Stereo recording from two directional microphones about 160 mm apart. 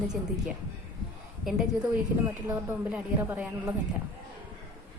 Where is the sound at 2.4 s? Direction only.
10° right (ahead or behind).